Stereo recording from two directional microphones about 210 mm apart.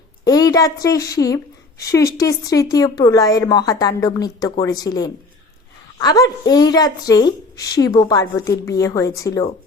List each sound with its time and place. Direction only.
0.3 s a woman's voice: 15° left (ahead or behind)